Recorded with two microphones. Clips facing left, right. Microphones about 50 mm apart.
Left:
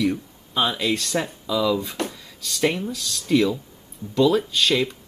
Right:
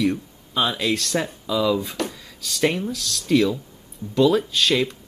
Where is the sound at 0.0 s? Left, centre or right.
Centre.